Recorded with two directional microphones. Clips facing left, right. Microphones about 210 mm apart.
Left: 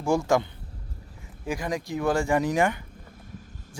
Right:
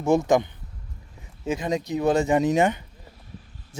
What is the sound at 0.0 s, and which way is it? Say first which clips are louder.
Speech: right 3 dB; 20° right (ahead or behind).